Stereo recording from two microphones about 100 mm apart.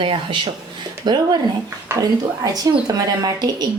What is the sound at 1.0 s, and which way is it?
Speech, 45° right (ahead or behind).